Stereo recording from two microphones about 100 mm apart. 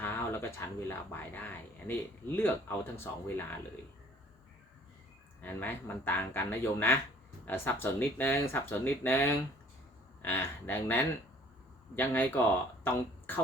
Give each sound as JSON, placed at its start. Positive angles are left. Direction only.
{"t": 0.0, "sound": "a sound", "side_deg": 20}
{"t": 0.9, "sound": "speech", "side_deg": 20}
{"t": 5.4, "sound": "speech", "side_deg": 15}